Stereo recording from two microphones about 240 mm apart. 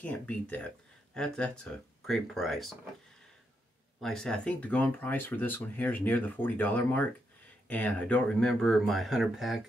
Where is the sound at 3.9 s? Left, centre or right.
Centre.